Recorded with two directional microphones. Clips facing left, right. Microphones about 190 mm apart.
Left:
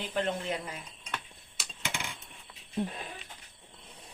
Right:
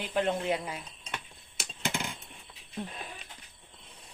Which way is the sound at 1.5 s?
45° right (ahead or behind).